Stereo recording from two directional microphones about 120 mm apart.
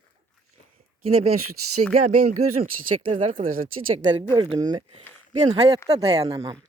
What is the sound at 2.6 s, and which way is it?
Speech, 50° right (ahead or behind).